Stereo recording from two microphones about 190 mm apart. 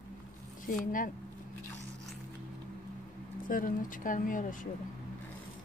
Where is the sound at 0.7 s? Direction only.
45° left (ahead or behind).